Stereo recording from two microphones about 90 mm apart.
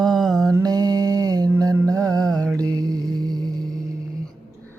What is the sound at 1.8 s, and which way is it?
Music, 40° right (ahead or behind).